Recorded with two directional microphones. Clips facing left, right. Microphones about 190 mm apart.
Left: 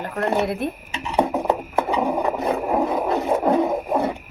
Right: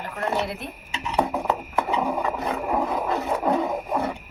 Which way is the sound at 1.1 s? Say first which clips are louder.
Left 4 dB; 15° left (ahead or behind).